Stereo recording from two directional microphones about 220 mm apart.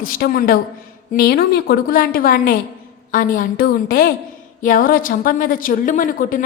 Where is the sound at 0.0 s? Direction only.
40° left (ahead or behind).